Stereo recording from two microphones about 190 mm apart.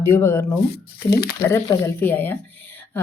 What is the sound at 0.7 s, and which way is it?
Speech, 55° left (ahead or behind).